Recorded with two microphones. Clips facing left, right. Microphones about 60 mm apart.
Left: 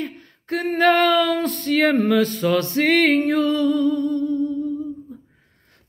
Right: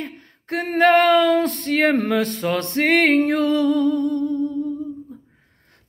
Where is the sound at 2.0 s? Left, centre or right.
Right.